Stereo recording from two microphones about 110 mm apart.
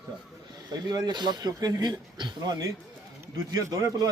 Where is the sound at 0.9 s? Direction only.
40° right (ahead or behind).